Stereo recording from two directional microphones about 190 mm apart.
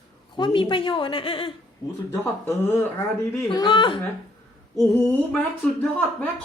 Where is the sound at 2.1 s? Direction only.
15° left (ahead or behind).